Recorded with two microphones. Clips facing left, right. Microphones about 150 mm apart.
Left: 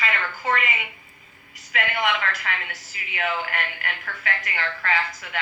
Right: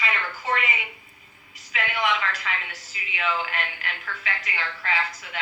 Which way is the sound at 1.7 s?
55° left (ahead or behind).